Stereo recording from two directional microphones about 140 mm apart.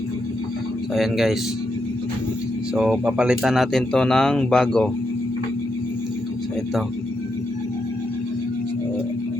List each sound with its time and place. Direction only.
0.9 s speech: centre (ahead or behind)
2.7 s speech: 5° right (ahead or behind)